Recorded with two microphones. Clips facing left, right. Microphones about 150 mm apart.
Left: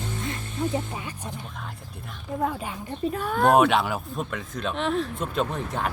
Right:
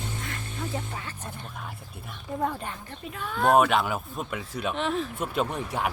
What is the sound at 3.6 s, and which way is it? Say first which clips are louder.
A woman's voice: left 2 dB; centre (ahead or behind).